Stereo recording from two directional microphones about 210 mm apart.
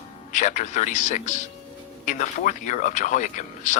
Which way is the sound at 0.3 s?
35° left (ahead or behind).